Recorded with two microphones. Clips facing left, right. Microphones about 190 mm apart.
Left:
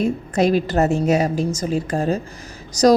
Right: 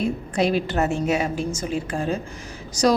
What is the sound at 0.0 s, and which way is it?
Speech, 45° left (ahead or behind).